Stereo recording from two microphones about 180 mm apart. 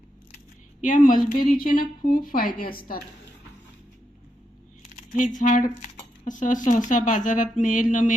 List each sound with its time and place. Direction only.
0.8 s speech: 45° left (ahead or behind)
5.4 s speech: 45° left (ahead or behind)